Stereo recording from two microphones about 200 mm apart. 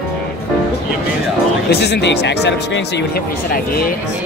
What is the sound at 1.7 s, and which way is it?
Speech, 55° left (ahead or behind).